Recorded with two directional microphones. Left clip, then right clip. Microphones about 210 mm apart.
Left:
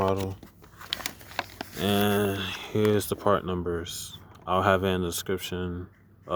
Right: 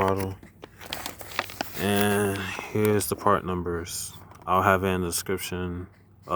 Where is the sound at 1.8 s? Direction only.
10° left (ahead or behind).